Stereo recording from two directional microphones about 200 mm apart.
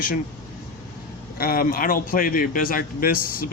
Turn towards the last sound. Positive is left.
turn(degrees=45)  # may be behind; listen again after turning